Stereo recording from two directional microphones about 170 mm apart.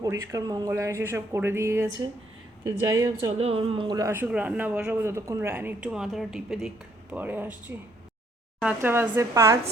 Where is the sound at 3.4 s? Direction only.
35° right (ahead or behind); by 9.6 s 15° right (ahead or behind).